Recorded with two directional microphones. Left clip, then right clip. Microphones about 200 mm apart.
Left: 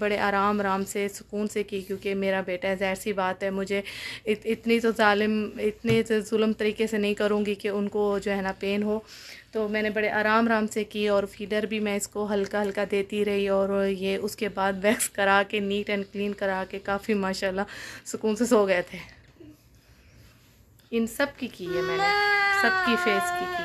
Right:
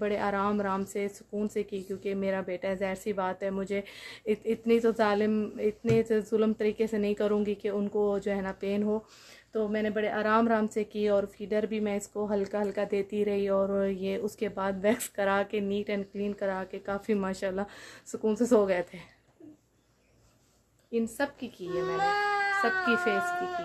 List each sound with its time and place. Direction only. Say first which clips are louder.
0.0 s a woman's voice: left 5 dB; centre (ahead or behind)
20.9 s a woman's voice: left 4 dB; 15° left (ahead or behind)
21.9 s speech: left 5 dB; 35° right (ahead or behind)
22.8 s a woman's voice: left 3 dB; 5° left (ahead or behind)
23.2 s speech: left 3 dB; 30° right (ahead or behind)